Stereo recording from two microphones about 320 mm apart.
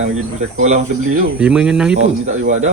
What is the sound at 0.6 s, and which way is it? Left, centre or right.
Speech, right.